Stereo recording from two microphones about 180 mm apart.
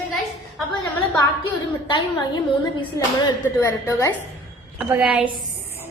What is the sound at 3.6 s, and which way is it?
Speech, 15° left (ahead or behind).